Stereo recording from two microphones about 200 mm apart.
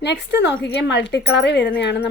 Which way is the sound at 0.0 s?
60° left (ahead or behind).